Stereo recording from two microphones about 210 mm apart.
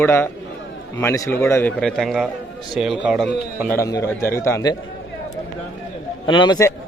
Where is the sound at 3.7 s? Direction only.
15° left (ahead or behind).